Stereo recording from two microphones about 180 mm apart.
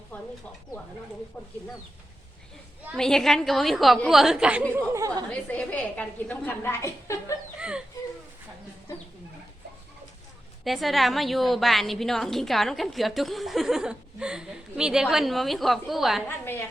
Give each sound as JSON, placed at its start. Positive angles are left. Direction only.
{"t": 0.1, "sound": "a sound", "side_deg": 10}
{"t": 2.9, "sound": "a woman's voice", "side_deg": 0}
{"t": 4.9, "sound": "a woman's voice", "side_deg": -15}
{"t": 5.3, "sound": "a woman's voice", "side_deg": 10}
{"t": 7.6, "sound": "speech", "side_deg": -5}
{"t": 10.6, "sound": "a woman's voice", "side_deg": 0}
{"t": 16.2, "sound": "a woman's voice", "side_deg": 10}